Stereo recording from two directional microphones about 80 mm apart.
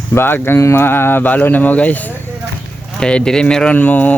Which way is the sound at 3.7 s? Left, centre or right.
Left.